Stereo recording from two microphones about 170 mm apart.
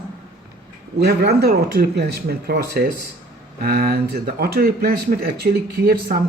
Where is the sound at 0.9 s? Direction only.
70° right (ahead or behind).